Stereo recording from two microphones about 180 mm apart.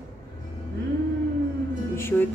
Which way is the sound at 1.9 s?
15° left (ahead or behind).